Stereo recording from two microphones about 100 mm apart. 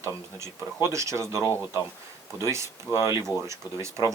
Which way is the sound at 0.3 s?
30° right (ahead or behind).